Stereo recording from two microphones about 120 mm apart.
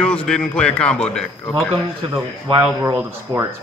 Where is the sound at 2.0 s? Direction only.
50° right (ahead or behind).